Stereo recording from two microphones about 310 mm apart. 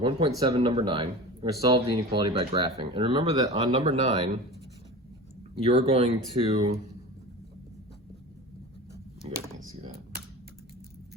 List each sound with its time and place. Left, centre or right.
0.0 s speech: centre
5.6 s speech: centre
9.2 s speech: centre
9.6 s computer keyboard: right